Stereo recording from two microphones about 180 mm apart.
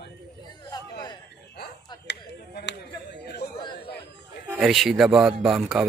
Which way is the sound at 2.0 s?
70° left (ahead or behind).